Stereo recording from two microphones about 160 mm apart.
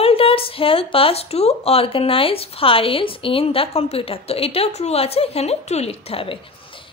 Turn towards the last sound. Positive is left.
turn(degrees=35)  # may be behind; listen again after turning